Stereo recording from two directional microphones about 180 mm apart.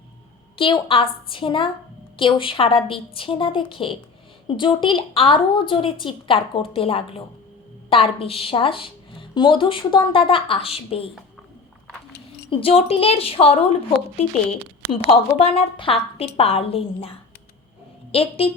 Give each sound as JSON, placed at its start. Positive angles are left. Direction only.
{"t": 0.5, "sound": "a woman's voice", "side_deg": 30}
{"t": 12.5, "sound": "a woman's voice", "side_deg": 30}
{"t": 14.8, "sound": "a woman's voice", "side_deg": 30}